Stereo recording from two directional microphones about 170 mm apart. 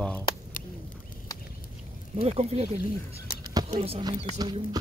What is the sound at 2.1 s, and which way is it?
Speech, 40° right (ahead or behind).